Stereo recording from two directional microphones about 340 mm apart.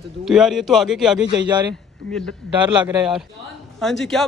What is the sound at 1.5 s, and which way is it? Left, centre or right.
A man's voice, centre.